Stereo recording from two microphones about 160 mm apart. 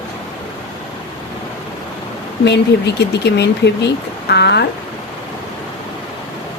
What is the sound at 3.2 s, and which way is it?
Speech, 90° left.